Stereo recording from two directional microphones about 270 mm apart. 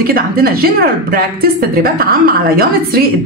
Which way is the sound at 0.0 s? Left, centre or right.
Right.